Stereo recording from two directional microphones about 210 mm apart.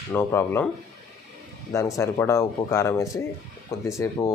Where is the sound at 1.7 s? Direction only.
15° left (ahead or behind).